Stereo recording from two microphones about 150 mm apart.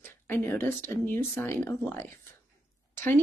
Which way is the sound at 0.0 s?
15° left (ahead or behind).